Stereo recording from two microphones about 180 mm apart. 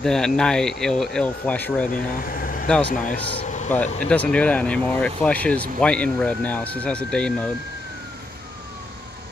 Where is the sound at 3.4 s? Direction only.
40° left (ahead or behind).